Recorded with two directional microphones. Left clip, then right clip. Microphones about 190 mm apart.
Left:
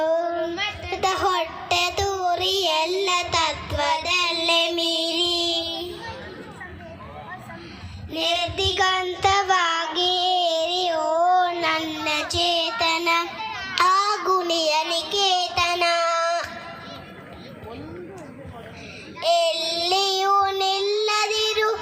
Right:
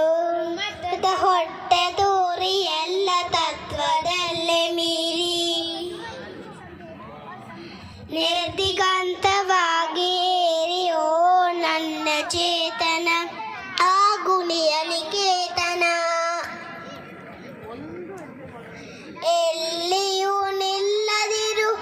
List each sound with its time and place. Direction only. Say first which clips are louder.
0.0 s child singing: right 2 dB; 15° right (ahead or behind)
1.0 s a sound: right 2 dB; 30° left (ahead or behind)
1.7 s child singing: right 4 dB; 55° left (ahead or behind)
3.7 s child singing: even; 15° left (ahead or behind); by 5.6 s 30° right (ahead or behind)
8.1 s child singing: right 1 dB; 45° right (ahead or behind)
11.9 s child singing: right 1 dB; 55° right (ahead or behind)
13.7 s child singing: right 1 dB; 30° right (ahead or behind)
19.2 s child singing: left 1 dB; 25° right (ahead or behind)